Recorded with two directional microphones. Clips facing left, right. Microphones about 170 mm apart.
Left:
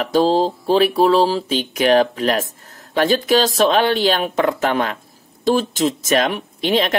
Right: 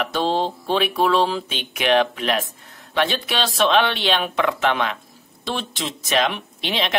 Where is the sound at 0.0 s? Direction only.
35° left (ahead or behind).